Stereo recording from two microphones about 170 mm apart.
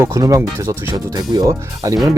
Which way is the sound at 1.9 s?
20° right (ahead or behind).